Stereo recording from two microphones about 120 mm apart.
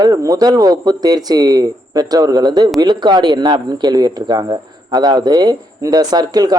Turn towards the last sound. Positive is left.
turn(degrees=-35)  # may be behind; listen again after turning